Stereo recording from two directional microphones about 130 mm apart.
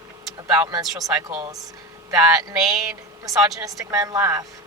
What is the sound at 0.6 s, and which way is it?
Speech, 30° right (ahead or behind).